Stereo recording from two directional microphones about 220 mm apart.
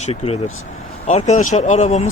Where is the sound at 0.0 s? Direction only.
30° left (ahead or behind).